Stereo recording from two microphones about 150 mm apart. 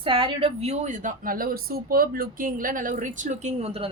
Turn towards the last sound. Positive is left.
turn(degrees=-40)  # may be behind; listen again after turning